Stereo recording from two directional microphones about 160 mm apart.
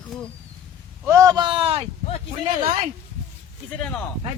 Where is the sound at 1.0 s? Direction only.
20° right (ahead or behind).